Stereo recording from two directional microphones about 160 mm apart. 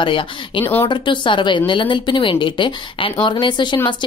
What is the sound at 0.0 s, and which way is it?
Speech, 30° left (ahead or behind).